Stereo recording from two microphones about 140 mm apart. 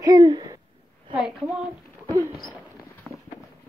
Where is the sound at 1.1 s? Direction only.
5° right (ahead or behind).